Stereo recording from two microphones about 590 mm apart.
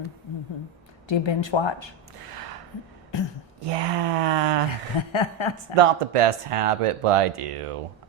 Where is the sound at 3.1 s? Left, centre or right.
Left.